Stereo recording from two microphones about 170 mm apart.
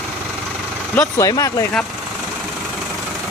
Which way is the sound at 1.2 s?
20° left (ahead or behind).